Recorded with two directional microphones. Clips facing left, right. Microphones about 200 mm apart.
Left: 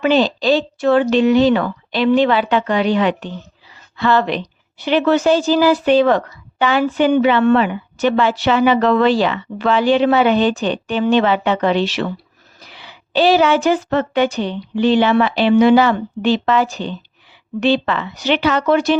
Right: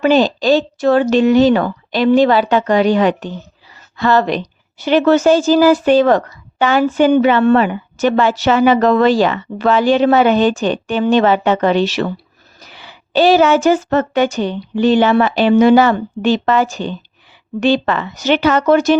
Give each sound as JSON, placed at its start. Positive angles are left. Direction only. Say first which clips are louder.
{"t": 0.0, "sound": "a woman's voice", "louder": "right 2 dB", "side_deg": -45}